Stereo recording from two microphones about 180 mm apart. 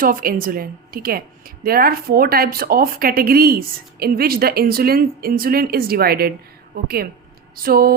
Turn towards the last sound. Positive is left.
turn(degrees=-55)  # may be behind; listen again after turning